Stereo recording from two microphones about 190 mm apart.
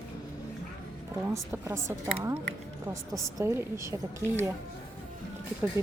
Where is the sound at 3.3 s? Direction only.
15° right (ahead or behind).